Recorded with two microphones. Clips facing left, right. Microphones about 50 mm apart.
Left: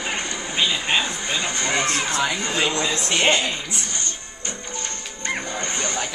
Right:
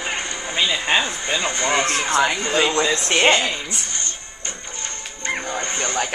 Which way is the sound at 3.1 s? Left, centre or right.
Right.